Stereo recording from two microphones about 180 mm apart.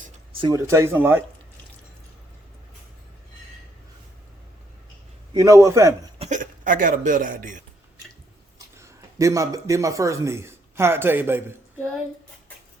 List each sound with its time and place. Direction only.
0.3 s speech: 20° right (ahead or behind)
5.3 s speech: 20° right (ahead or behind)
6.1 s speech: 40° right (ahead or behind)
8.5 s speech: 15° right (ahead or behind)